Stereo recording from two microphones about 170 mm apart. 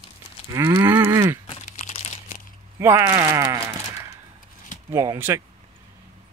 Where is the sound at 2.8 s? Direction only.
15° right (ahead or behind).